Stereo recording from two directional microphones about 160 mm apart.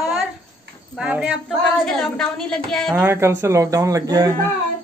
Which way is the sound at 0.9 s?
5° right (ahead or behind).